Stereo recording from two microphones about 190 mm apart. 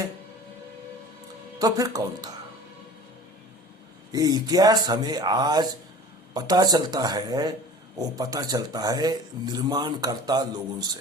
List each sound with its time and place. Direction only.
1.5 s speech: 20° right (ahead or behind)
4.1 s speech: 20° right (ahead or behind)